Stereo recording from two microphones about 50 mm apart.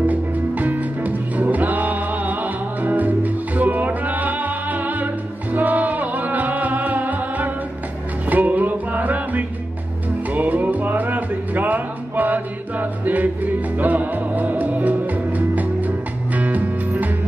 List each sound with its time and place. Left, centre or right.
0.0 s music: right